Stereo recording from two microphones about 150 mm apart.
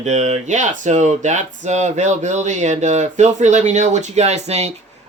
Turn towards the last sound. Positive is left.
turn(degrees=-45)  # may be behind; listen again after turning